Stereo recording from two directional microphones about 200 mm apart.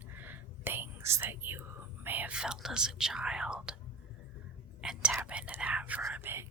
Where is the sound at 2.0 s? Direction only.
10° right (ahead or behind).